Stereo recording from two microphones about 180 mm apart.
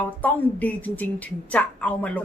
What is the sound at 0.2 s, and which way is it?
Speech, 10° left (ahead or behind).